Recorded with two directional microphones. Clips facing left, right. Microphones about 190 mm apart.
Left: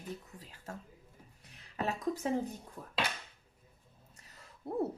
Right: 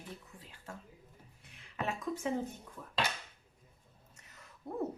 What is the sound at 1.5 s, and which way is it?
Speech, 40° left (ahead or behind).